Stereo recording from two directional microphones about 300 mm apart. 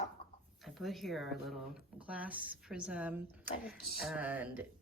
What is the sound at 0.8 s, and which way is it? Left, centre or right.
Speech, centre.